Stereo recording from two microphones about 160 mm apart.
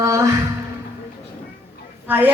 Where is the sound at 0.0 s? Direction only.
20° right (ahead or behind).